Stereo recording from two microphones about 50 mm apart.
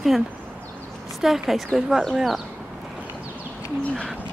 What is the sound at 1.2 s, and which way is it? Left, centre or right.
Speech, centre.